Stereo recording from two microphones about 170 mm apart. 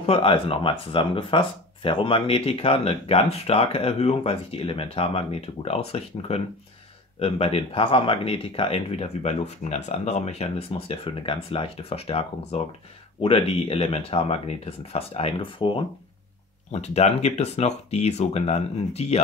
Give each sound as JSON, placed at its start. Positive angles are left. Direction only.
{"t": 0.0, "sound": "speech", "side_deg": 35}